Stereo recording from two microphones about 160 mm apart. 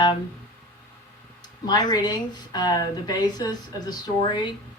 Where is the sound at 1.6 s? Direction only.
25° left (ahead or behind).